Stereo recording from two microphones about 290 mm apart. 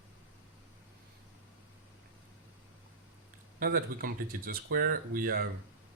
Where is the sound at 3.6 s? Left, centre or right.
Right.